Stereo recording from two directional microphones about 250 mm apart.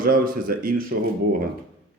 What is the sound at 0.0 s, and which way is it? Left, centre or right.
Speech, right.